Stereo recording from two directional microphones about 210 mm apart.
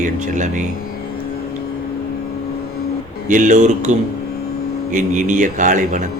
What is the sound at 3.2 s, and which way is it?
Speech, 35° right (ahead or behind).